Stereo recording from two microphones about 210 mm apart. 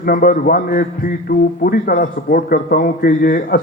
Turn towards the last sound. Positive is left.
turn(degrees=40)  # may be behind; listen again after turning